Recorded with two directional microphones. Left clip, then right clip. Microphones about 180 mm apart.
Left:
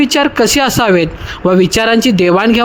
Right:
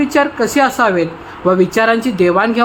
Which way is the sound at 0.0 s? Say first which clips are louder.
Left 3 dB; 45° left (ahead or behind).